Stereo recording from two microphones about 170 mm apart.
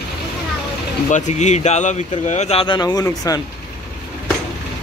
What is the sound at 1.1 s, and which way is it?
Speech, 45° left (ahead or behind).